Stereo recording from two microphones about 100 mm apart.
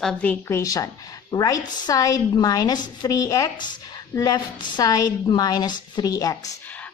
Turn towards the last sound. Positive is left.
turn(degrees=35)  # may be behind; listen again after turning